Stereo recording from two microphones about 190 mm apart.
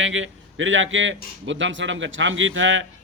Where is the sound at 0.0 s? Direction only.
90° right.